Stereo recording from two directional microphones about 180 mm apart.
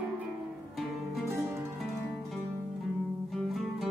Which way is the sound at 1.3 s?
15° right (ahead or behind).